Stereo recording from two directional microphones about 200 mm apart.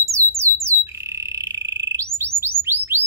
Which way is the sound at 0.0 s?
15° right (ahead or behind).